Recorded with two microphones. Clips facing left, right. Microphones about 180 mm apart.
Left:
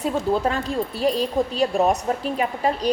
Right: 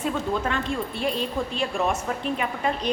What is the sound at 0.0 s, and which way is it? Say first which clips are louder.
A woman's voice: left 4 dB; 35° left (ahead or behind).